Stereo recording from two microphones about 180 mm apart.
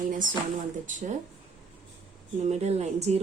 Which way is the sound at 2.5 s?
40° right (ahead or behind).